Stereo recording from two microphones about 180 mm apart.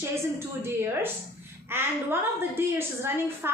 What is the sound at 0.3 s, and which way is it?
A woman's voice, 15° right (ahead or behind).